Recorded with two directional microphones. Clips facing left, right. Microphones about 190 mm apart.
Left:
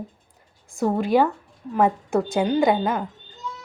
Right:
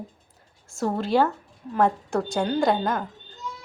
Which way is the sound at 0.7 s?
15° left (ahead or behind).